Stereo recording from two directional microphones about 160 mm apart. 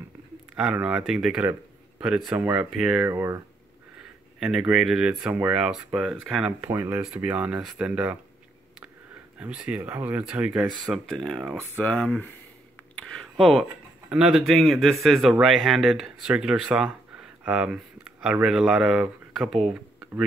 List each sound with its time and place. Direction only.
0.6 s speech: 5° right (ahead or behind)
3.1 s speech: 20° right (ahead or behind)
4.4 s speech: 5° right (ahead or behind)
6.6 s speech: 15° right (ahead or behind)
9.4 s speech: 10° right (ahead or behind); by 12.4 s 10° left (ahead or behind)
12.9 s a sound: 5° left (ahead or behind)
14.0 s speech: 5° right (ahead or behind)